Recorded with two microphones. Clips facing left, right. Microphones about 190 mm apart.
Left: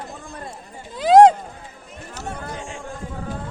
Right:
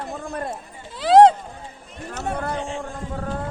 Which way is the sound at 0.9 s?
15° left (ahead or behind).